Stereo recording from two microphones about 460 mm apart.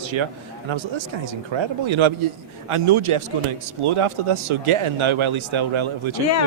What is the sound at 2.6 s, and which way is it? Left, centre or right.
Speech, right.